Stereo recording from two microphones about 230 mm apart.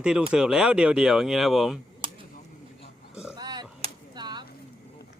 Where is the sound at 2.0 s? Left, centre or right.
Right.